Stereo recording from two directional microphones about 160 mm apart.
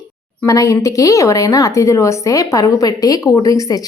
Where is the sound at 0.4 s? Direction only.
20° left (ahead or behind).